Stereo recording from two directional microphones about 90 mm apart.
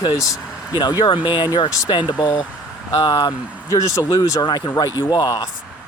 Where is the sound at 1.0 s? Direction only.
60° left (ahead or behind); by 3.3 s 45° left (ahead or behind).